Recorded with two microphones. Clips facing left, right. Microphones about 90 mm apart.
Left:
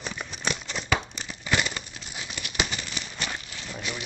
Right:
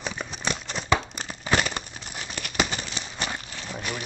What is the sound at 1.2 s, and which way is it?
Crumpling, 50° right (ahead or behind).